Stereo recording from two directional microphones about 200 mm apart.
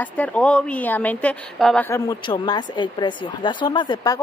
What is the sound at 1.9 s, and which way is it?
A woman's voice, 15° left (ahead or behind).